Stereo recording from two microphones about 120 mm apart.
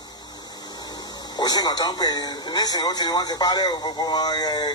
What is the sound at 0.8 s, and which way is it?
Speech, 35° left (ahead or behind).